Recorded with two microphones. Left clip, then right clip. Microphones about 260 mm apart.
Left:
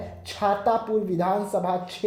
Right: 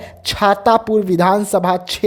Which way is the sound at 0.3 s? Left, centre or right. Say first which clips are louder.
Right 10 dB; right.